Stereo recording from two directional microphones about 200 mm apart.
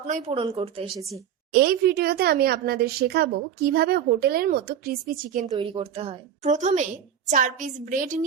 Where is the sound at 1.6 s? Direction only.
50° right (ahead or behind).